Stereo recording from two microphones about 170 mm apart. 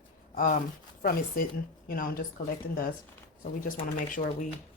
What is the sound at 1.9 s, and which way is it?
Speech, 60° left (ahead or behind).